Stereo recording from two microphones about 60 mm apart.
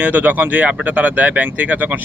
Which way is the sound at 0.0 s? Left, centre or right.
Right.